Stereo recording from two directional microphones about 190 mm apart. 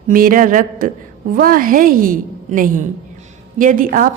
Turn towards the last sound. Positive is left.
turn(degrees=-45)  # may be behind; listen again after turning